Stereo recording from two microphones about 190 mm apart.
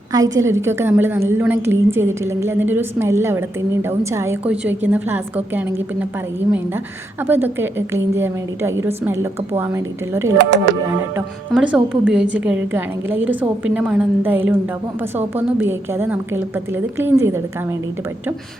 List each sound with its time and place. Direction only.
0.1 s a woman's voice: 15° right (ahead or behind)
7.3 s a woman's voice: 10° right (ahead or behind)
10.3 s speech: 65° right (ahead or behind)
11.5 s a woman's voice: 5° right (ahead or behind)